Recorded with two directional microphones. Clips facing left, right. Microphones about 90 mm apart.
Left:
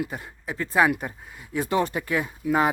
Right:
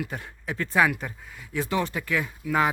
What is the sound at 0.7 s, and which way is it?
Speech, 25° left (ahead or behind).